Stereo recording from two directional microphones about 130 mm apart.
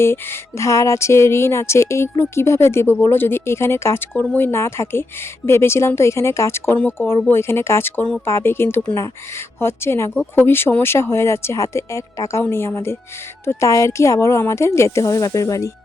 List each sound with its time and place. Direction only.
0.0 s speech: 20° left (ahead or behind)